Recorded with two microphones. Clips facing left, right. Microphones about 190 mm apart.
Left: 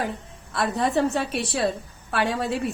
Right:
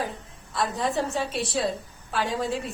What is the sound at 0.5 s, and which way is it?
A woman's voice, 60° left (ahead or behind).